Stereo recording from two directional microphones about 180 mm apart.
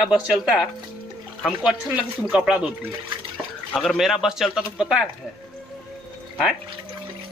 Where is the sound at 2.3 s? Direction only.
5° right (ahead or behind).